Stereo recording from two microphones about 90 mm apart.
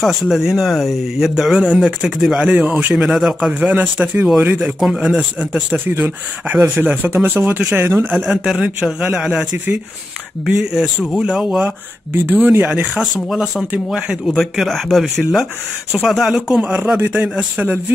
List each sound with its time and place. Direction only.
0.0 s speech: 5° right (ahead or behind)
2.5 s speech: 20° right (ahead or behind)
2.9 s a man's voice: 10° right (ahead or behind)
4.7 s speech: centre (ahead or behind)
5.0 s a man's voice: 15° right (ahead or behind)
10.5 s a man's voice: 10° right (ahead or behind)
12.1 s speech: 25° right (ahead or behind)
13.0 s a man's voice: centre (ahead or behind)